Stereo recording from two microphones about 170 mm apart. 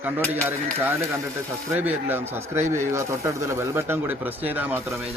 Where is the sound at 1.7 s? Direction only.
10° right (ahead or behind).